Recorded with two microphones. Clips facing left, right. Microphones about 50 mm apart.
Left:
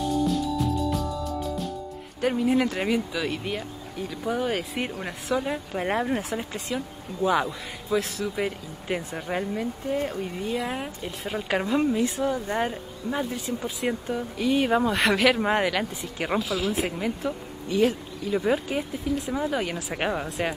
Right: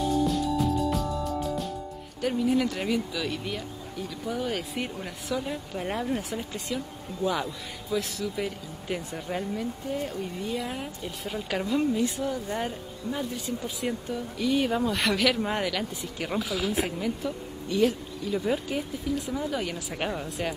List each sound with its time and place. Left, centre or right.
0.0 s music: centre
2.2 s speech: left
17.0 s speech: left